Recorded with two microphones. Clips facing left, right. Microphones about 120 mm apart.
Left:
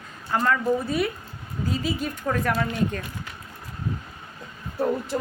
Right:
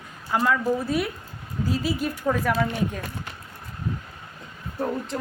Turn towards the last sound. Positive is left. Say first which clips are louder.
# left 3 dB
turn(degrees=5)  # may be behind; listen again after turning